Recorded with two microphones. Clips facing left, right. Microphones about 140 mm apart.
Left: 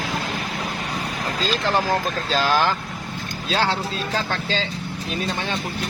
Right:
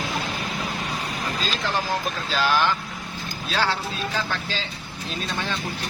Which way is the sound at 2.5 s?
35° left (ahead or behind).